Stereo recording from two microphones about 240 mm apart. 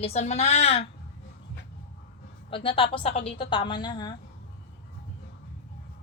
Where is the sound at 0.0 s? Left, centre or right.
Left.